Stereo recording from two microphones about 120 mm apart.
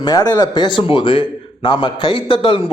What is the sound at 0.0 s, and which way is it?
Speech, 30° left (ahead or behind).